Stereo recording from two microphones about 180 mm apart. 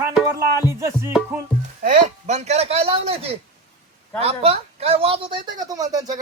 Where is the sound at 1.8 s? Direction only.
50° right (ahead or behind).